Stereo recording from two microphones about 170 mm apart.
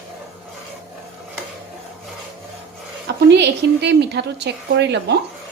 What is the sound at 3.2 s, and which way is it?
A woman's voice, 90° right.